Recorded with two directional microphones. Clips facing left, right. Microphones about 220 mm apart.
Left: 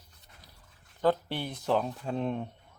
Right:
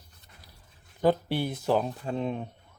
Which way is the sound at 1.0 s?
10° right (ahead or behind).